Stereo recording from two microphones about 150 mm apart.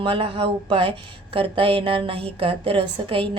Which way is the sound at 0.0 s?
40° right (ahead or behind).